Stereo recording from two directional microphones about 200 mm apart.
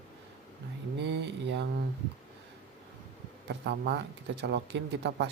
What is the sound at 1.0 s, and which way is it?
Speech, 60° right (ahead or behind).